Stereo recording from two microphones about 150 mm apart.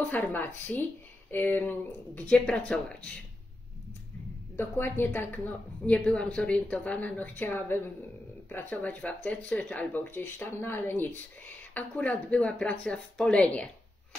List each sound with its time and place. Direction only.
0.1 s speech: 10° left (ahead or behind)
4.6 s speech: 15° left (ahead or behind)